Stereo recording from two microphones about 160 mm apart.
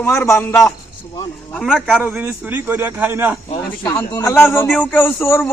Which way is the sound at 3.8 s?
15° left (ahead or behind).